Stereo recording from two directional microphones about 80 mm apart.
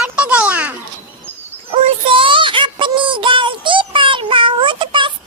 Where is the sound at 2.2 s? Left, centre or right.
Right.